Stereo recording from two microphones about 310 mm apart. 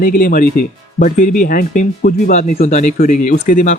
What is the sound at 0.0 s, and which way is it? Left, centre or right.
Speech, left.